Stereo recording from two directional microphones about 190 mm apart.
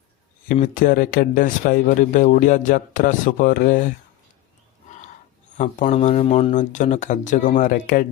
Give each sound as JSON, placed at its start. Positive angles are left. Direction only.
{"t": 0.6, "sound": "speech", "side_deg": 45}
{"t": 4.9, "sound": "a sound", "side_deg": 40}
{"t": 5.5, "sound": "speech", "side_deg": 40}